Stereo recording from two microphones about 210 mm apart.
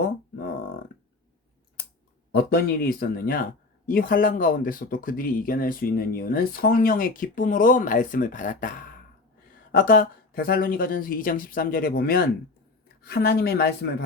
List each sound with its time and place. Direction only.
2.3 s speech: 50° left (ahead or behind)